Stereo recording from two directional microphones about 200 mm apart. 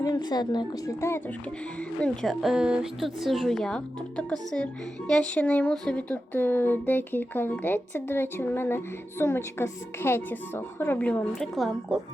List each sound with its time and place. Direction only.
0.0 s a woman's voice: 20° left (ahead or behind)
2.0 s speech: centre (ahead or behind)